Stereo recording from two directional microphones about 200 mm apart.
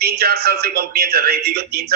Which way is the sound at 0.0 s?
50° right (ahead or behind).